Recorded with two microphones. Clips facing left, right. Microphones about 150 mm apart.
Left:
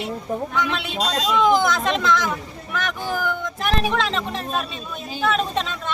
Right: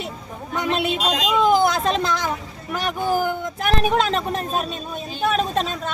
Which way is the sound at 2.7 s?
40° right (ahead or behind).